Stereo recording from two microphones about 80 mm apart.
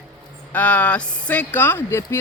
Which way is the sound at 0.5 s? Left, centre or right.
Centre.